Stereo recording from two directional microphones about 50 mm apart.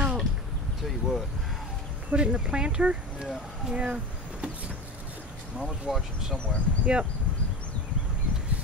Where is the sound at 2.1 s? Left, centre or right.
Right.